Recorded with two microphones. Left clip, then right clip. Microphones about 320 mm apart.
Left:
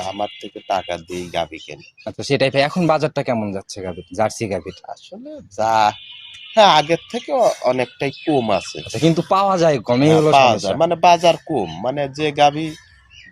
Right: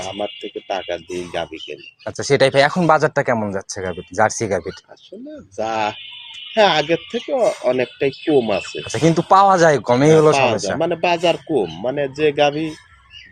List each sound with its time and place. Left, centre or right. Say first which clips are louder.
0.7 s speech: left 3 dB; left
2.0 s speech: right 3 dB; centre
5.5 s speech: left 5 dB; left
8.9 s speech: right 3 dB; centre
10.3 s speech: left 4 dB; left